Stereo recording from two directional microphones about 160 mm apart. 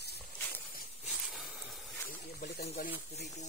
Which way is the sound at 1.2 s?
Centre (ahead or behind).